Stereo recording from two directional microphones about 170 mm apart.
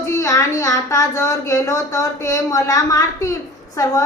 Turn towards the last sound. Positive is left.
turn(degrees=20)  # may be behind; listen again after turning